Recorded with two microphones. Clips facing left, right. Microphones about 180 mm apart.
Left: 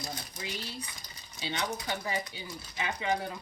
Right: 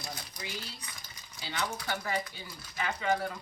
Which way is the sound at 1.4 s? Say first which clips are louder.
Left 2 dB; 20° left (ahead or behind).